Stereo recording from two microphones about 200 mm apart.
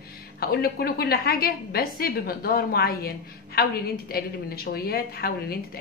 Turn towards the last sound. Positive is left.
turn(degrees=50)  # may be behind; listen again after turning